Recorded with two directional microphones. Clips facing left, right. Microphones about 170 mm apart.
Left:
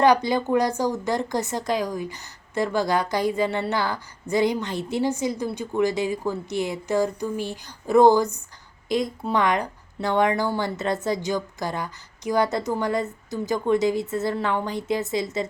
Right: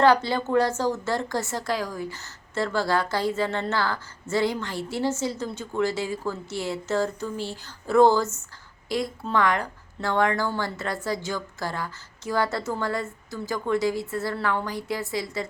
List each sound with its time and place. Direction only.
0.0 s a woman's voice: 15° left (ahead or behind)